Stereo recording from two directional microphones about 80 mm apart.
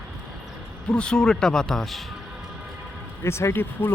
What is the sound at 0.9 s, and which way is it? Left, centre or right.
Speech, centre.